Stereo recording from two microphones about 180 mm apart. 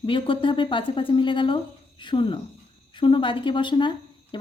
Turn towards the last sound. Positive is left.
turn(degrees=25)  # may be behind; listen again after turning